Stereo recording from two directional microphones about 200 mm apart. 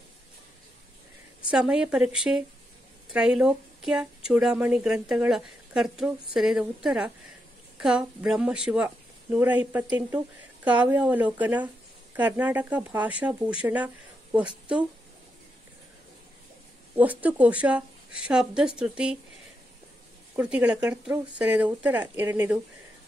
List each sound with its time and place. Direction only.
1.5 s a woman's voice: 5° right (ahead or behind)
16.9 s a woman's voice: 10° right (ahead or behind)
20.3 s a woman's voice: 5° right (ahead or behind)